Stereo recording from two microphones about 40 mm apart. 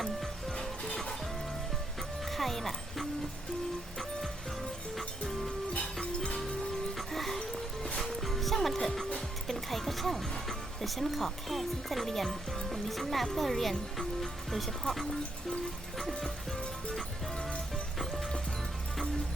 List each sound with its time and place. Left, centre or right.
2.3 s music: centre
6.0 s music: centre
7.1 s music: centre
10.8 s speech: centre